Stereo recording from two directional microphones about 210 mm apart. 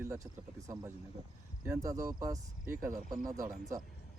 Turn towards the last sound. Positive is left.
turn(degrees=-15)  # may be behind; listen again after turning